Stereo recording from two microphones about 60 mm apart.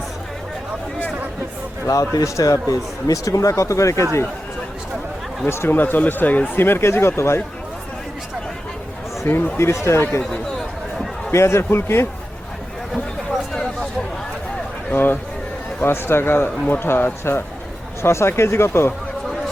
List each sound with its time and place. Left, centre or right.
1.9 s a man's voice: left
5.5 s speech: left
5.7 s speech: left
9.2 s speech: left
9.6 s speech: left
11.3 s speech: left
14.9 s speech: left